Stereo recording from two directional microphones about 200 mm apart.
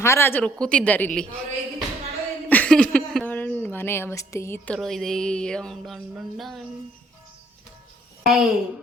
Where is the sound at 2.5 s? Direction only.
5° left (ahead or behind).